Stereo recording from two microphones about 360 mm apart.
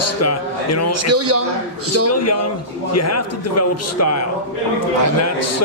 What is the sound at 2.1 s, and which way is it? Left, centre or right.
A man's voice, left.